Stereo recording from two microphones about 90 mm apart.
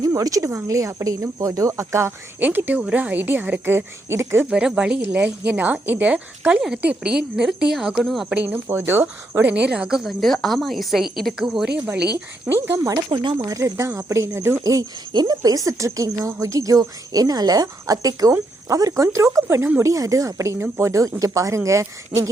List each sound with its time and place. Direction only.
0.0 s speech: 40° right (ahead or behind)
2.4 s a woman's voice: 20° right (ahead or behind)
4.4 s a woman's voice: 10° right (ahead or behind)
8.7 s a woman's voice: 25° right (ahead or behind)
9.5 s a woman's voice: 10° right (ahead or behind)
12.5 s speech: 30° right (ahead or behind)
12.9 s speech: 60° right (ahead or behind)
13.4 s speech: 40° right (ahead or behind)
15.1 s speech: 50° right (ahead or behind); by 22.3 s 35° right (ahead or behind)